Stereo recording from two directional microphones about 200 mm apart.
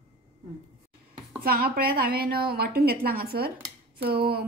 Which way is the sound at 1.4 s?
45° right (ahead or behind).